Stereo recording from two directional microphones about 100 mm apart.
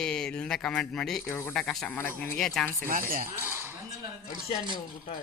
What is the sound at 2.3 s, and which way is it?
Speech, 5° left (ahead or behind).